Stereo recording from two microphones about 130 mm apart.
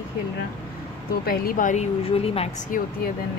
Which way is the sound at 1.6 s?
80° left.